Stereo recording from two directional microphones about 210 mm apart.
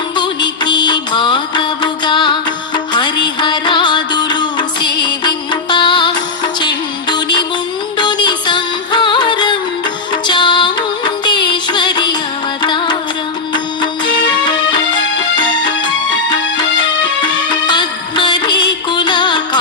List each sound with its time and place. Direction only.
0.2 s music: 20° left (ahead or behind)
17.5 s music: 20° left (ahead or behind)